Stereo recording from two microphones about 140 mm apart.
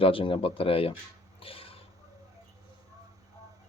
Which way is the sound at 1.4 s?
40° left (ahead or behind).